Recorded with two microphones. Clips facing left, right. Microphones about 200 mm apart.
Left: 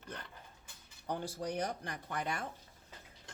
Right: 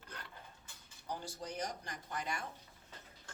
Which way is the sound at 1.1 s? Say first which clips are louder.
Left 6 dB; 60° left (ahead or behind).